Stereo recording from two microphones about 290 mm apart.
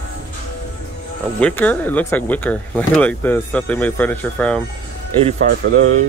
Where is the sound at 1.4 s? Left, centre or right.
Centre.